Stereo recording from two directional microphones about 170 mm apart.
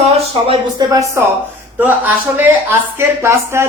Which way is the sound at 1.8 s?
10° right (ahead or behind).